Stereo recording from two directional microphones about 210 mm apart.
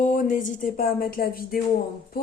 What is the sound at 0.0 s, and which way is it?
A woman's voice, 35° left (ahead or behind).